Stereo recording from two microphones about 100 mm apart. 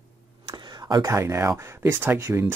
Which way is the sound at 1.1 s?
25° right (ahead or behind).